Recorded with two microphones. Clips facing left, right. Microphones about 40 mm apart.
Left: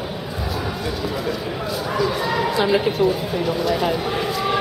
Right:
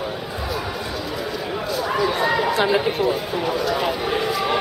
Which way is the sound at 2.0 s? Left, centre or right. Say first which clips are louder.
Right 2 dB; right.